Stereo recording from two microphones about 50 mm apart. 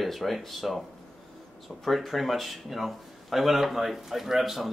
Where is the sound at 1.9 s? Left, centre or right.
Centre.